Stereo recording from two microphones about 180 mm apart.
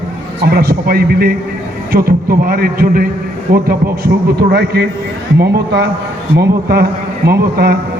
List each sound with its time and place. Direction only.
0.4 s a man's voice: 55° right (ahead or behind)